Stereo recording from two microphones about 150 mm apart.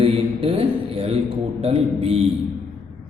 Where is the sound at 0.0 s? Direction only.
40° right (ahead or behind).